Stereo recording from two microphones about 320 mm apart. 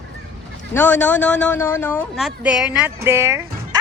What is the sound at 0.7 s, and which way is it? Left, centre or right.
Speech, centre.